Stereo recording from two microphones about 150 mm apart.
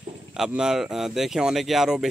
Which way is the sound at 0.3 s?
5° right (ahead or behind).